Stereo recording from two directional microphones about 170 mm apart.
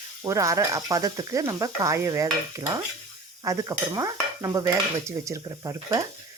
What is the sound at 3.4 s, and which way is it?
Stir, 20° right (ahead or behind).